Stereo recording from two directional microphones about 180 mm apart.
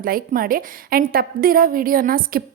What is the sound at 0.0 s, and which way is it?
A woman's voice, 50° right (ahead or behind).